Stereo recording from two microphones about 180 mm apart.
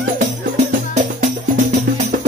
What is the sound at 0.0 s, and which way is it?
Music, 50° right (ahead or behind).